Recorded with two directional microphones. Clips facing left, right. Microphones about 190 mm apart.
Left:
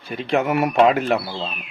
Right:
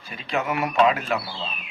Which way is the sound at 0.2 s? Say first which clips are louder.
Left 6 dB; 50° left (ahead or behind).